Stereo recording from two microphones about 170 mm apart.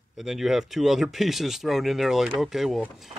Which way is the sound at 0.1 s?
Centre (ahead or behind).